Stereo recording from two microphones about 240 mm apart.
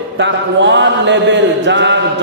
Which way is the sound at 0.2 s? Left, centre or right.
Right.